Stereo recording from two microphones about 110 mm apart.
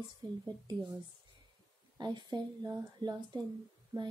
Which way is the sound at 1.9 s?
40° right (ahead or behind).